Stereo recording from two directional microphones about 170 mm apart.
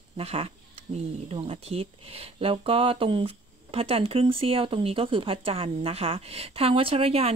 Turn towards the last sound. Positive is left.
turn(degrees=-35)  # may be behind; listen again after turning